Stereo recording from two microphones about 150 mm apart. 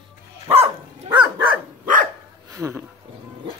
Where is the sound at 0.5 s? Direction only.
35° right (ahead or behind).